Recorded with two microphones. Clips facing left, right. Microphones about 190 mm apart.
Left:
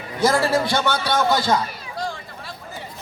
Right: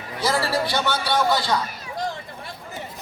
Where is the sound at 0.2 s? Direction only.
50° left (ahead or behind).